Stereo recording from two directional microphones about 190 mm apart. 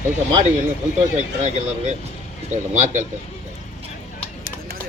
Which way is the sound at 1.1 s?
40° right (ahead or behind).